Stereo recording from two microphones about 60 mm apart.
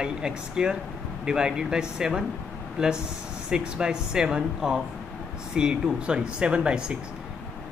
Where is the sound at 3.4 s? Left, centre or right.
Centre.